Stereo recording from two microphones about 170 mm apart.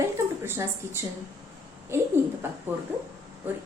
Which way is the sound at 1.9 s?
15° right (ahead or behind).